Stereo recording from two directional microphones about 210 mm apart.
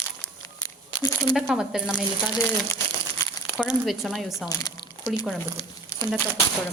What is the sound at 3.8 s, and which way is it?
Speech, centre (ahead or behind).